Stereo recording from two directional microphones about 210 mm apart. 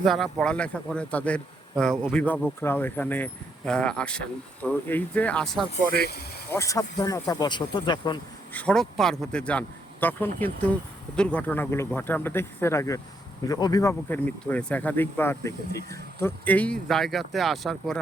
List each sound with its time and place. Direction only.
0.0 s speech: centre (ahead or behind)
5.9 s speech: 50° left (ahead or behind)
6.5 s speech: 15° left (ahead or behind)
8.5 s speech: 5° left (ahead or behind)